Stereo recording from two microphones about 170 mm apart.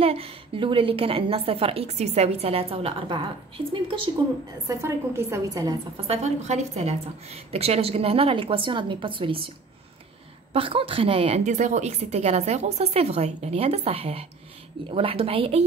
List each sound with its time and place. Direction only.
0.0 s a woman's voice: 35° right (ahead or behind)
4.6 s a woman's voice: 15° right (ahead or behind)
5.9 s a woman's voice: 40° right (ahead or behind)
10.5 s a woman's voice: 30° right (ahead or behind)